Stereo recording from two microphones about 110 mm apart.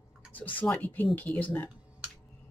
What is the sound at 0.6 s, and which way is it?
Speech, 15° left (ahead or behind).